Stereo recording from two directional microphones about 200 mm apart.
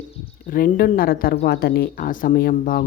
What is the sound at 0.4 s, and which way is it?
Speech, 45° left (ahead or behind).